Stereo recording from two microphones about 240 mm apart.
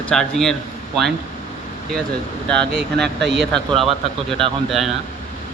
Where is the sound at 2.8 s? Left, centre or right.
Right.